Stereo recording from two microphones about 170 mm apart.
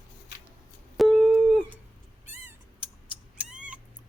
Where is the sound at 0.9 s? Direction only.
Centre (ahead or behind).